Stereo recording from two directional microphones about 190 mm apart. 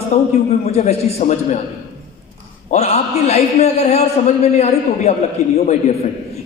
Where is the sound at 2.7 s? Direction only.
35° left (ahead or behind).